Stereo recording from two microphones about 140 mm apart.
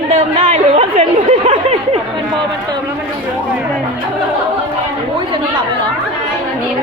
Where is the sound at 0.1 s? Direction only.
55° right (ahead or behind).